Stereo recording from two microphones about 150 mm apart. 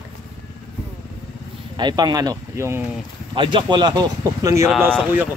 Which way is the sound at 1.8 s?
30° right (ahead or behind).